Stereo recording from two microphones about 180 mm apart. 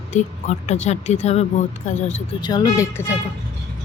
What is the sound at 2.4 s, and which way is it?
Speech, 20° left (ahead or behind).